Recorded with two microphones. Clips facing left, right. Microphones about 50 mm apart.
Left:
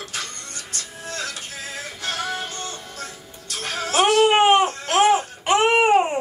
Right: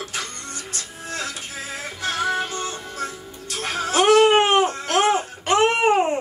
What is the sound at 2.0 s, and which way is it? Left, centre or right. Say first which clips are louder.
Music: right 5 dB; right.